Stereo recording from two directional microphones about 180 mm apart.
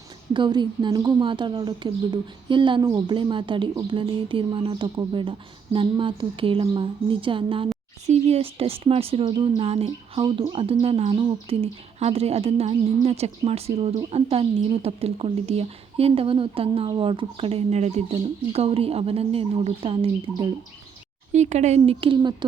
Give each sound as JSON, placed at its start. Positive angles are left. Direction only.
{"t": 0.3, "sound": "speech", "side_deg": -25}